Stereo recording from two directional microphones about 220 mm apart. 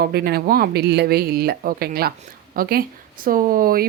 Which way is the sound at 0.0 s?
45° right (ahead or behind).